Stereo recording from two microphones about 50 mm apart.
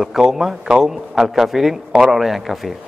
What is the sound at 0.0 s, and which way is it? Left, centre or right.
A man's voice, centre.